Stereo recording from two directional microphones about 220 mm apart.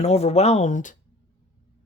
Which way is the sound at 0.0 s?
30° left (ahead or behind).